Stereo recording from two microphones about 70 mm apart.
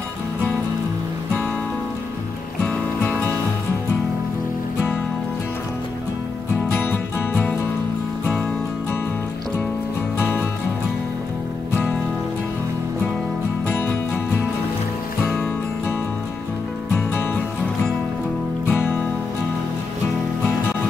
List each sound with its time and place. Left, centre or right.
2.6 s music: centre
6.9 s music: left
10.1 s music: left
13.7 s music: left
18.7 s music: left